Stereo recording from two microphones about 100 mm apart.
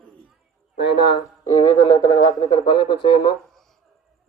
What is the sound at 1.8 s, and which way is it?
Speech, 45° left (ahead or behind).